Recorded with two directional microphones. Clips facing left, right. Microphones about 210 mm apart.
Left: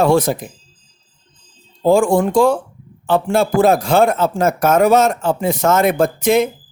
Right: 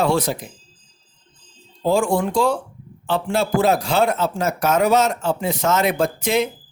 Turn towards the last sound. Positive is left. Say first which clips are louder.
# left 5 dB
turn(degrees=50)  # may be behind; listen again after turning